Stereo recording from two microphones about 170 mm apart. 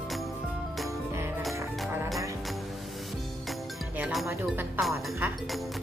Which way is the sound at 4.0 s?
5° right (ahead or behind).